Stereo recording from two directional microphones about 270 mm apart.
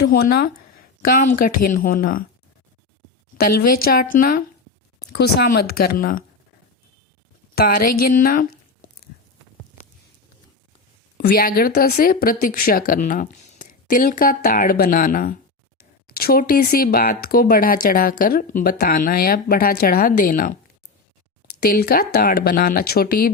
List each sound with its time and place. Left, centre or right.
0.0 s speech: left
3.7 s speech: left
7.5 s a woman's voice: left
11.2 s speech: left
21.7 s speech: left